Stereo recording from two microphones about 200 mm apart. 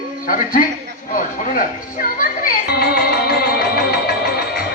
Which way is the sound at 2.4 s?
50° left (ahead or behind).